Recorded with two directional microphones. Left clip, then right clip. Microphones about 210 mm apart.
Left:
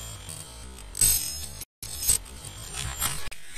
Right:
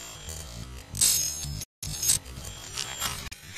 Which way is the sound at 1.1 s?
20° right (ahead or behind).